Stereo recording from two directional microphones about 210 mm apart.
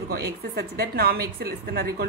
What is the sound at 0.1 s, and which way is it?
A woman's voice, 50° right (ahead or behind).